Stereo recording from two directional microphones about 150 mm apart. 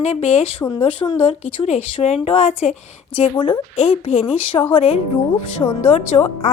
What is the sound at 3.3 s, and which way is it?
Speech, 30° left (ahead or behind).